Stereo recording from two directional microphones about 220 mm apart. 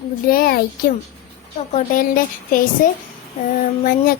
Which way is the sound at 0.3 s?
40° left (ahead or behind).